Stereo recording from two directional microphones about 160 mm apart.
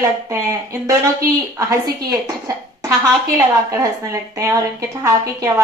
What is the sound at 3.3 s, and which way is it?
A woman's voice, 20° right (ahead or behind).